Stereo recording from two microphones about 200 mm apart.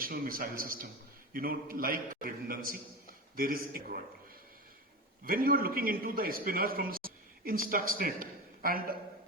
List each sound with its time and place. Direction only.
0.0 s a man's voice: 45° right (ahead or behind)
5.2 s a man's voice: 45° right (ahead or behind)